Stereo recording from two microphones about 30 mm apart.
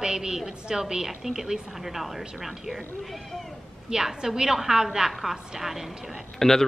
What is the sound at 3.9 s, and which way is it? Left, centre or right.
A woman's voice, right.